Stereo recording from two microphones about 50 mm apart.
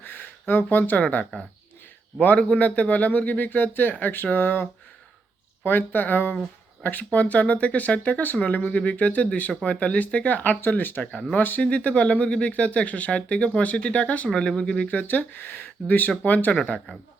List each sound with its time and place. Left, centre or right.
0.0 s a sound: left
2.5 s speech: left
14.8 s speech: left